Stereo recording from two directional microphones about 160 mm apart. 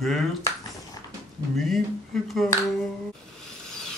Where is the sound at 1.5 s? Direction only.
Centre (ahead or behind).